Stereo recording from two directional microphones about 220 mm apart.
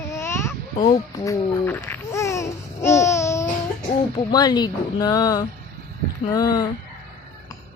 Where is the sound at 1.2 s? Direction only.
10° left (ahead or behind).